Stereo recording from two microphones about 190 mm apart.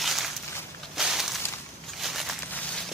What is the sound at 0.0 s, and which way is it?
Walk, centre (ahead or behind).